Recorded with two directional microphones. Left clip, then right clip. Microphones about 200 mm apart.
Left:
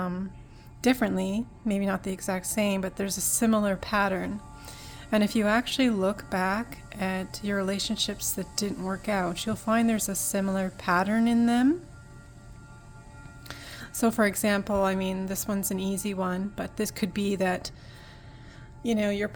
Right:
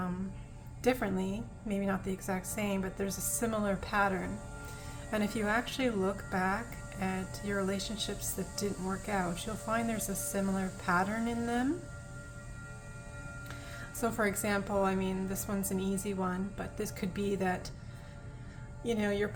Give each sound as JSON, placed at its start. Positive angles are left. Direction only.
{"t": 0.8, "sound": "speech", "side_deg": 50}
{"t": 13.5, "sound": "speech", "side_deg": 50}
{"t": 18.8, "sound": "speech", "side_deg": 45}